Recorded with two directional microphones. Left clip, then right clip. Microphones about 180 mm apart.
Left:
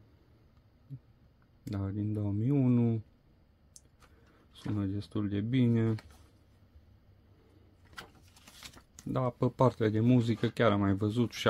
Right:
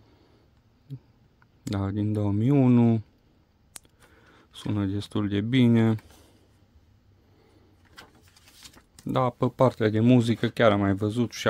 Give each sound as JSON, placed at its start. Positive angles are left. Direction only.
{"t": 1.6, "sound": "speech", "side_deg": -45}
{"t": 4.3, "sound": "speech", "side_deg": -40}
{"t": 9.1, "sound": "speech", "side_deg": -30}
{"t": 9.6, "sound": "speech", "side_deg": -20}